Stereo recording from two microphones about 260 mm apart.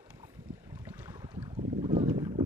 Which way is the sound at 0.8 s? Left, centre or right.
Centre.